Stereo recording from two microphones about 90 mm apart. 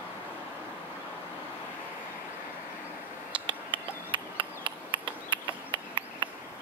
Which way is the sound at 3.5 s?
65° right (ahead or behind).